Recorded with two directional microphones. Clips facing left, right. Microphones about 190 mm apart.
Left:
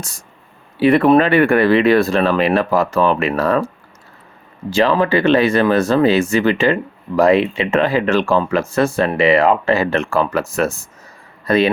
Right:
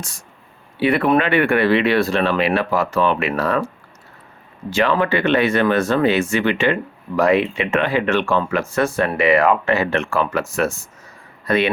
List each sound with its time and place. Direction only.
0.8 s speech: 40° left (ahead or behind)
4.7 s a man's voice: 35° left (ahead or behind)